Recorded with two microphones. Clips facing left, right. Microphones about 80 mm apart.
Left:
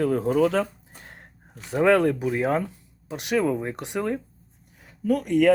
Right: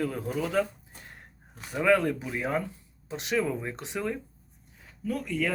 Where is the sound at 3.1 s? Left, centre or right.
Left.